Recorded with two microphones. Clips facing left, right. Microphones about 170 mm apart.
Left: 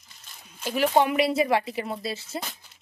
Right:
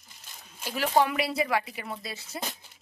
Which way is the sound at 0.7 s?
20° left (ahead or behind).